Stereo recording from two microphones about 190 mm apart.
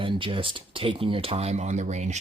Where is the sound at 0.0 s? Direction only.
25° right (ahead or behind).